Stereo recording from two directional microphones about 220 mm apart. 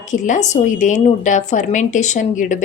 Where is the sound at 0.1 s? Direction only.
35° left (ahead or behind).